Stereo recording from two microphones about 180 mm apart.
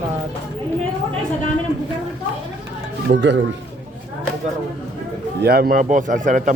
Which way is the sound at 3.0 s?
80° right.